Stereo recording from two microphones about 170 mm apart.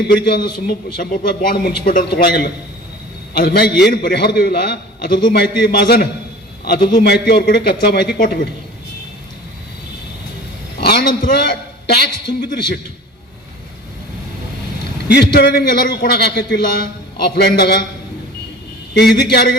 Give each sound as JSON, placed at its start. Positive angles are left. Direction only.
{"t": 0.1, "sound": "a man's voice", "side_deg": 65}
{"t": 8.2, "sound": "a man's voice", "side_deg": 55}
{"t": 10.8, "sound": "a sound", "side_deg": 70}
{"t": 11.9, "sound": "a man's voice", "side_deg": 70}
{"t": 15.0, "sound": "a man's voice", "side_deg": 70}
{"t": 18.9, "sound": "a man's voice", "side_deg": 70}